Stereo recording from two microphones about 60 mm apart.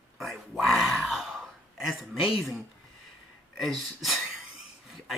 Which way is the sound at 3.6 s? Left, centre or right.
Centre.